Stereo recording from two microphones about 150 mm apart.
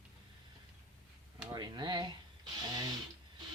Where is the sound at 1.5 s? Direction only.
30° right (ahead or behind).